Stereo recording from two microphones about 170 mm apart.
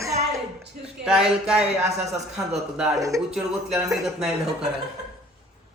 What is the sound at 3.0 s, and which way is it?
Speech, 20° right (ahead or behind).